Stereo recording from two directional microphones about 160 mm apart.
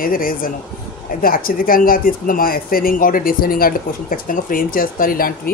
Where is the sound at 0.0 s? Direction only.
60° left (ahead or behind).